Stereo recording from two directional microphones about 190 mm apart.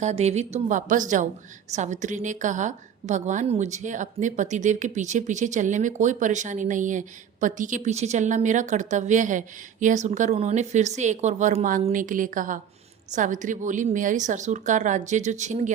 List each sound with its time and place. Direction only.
0.0 s a woman's voice: 35° right (ahead or behind)